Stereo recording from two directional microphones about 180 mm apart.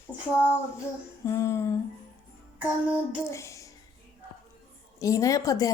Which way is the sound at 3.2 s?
15° left (ahead or behind).